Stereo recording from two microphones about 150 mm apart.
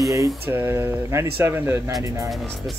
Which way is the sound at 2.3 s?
Centre (ahead or behind).